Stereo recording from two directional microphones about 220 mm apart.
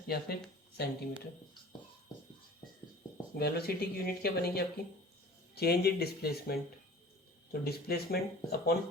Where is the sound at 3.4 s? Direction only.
45° left (ahead or behind).